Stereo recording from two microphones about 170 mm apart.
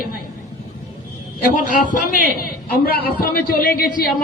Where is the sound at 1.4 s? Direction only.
55° left (ahead or behind).